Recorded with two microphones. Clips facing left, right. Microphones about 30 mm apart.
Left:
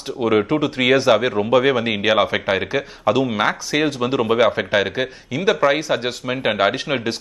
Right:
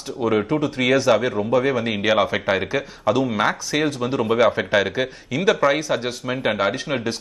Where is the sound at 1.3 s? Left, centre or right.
Left.